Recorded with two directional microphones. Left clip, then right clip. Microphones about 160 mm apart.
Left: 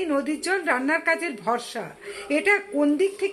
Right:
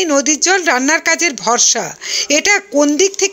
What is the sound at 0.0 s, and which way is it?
Speech, 40° right (ahead or behind).